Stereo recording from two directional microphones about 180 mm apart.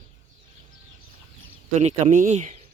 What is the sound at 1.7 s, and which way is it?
Speech, 40° right (ahead or behind).